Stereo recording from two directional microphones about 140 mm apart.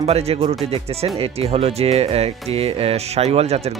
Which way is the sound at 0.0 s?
45° right (ahead or behind).